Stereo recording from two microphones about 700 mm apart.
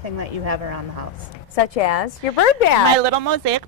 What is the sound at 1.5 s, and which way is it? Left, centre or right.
A woman's voice, left.